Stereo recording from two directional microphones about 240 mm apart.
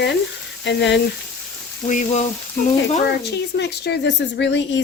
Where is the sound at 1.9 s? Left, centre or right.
Left.